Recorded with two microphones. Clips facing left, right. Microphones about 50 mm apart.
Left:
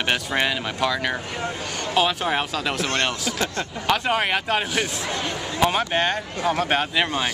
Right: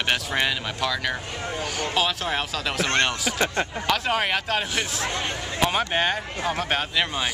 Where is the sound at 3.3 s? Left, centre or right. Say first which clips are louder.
Right 2 dB; right.